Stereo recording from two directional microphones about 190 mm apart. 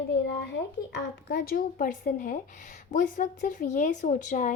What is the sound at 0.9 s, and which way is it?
A woman's voice, 55° left (ahead or behind).